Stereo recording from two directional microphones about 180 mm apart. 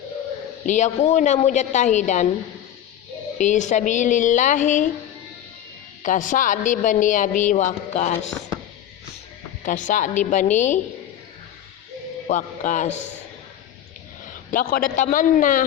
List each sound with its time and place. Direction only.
0.6 s a woman's voice: 40° left (ahead or behind)
3.3 s a man's voice: 45° left (ahead or behind)
6.0 s a man's voice: 45° left (ahead or behind)
9.6 s a man's voice: 45° left (ahead or behind)
12.3 s a man's voice: 45° left (ahead or behind)
14.5 s a man's voice: 50° left (ahead or behind)